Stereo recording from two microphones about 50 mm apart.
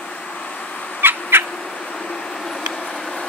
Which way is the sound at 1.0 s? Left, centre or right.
Right.